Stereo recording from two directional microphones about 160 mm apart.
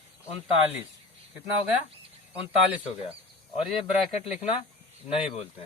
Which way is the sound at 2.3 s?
10° right (ahead or behind).